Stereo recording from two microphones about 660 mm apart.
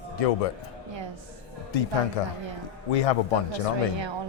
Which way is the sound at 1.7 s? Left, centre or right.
Left.